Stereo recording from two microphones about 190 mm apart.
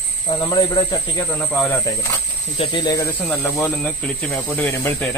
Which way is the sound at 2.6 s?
25° left (ahead or behind).